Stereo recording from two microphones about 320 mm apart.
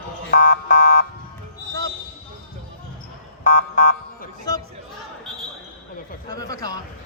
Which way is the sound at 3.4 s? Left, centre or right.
Left.